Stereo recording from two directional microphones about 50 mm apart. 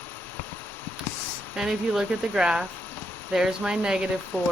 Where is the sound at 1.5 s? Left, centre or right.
Centre.